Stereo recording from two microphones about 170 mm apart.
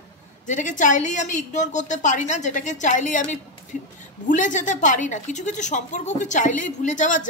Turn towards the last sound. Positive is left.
turn(degrees=50)  # may be behind; listen again after turning